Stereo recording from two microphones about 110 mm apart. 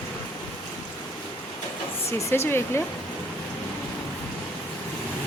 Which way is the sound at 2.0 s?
25° left (ahead or behind).